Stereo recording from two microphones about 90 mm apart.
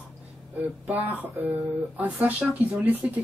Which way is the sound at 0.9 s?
20° right (ahead or behind).